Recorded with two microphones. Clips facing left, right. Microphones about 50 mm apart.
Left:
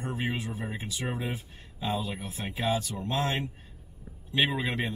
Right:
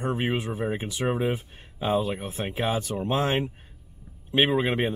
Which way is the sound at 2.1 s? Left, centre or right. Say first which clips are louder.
Right 6 dB; right.